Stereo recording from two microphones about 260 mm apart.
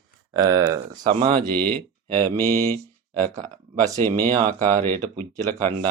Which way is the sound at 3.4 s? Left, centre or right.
Right.